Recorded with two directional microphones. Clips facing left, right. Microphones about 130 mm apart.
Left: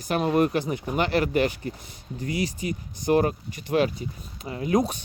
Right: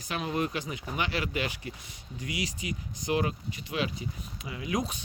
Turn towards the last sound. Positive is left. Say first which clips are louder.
# left 8 dB
turn(degrees=45)  # may be behind; listen again after turning